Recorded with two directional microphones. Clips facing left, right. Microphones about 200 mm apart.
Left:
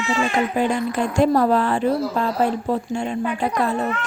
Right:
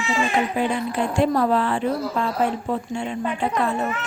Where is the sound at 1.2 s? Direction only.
40° left (ahead or behind).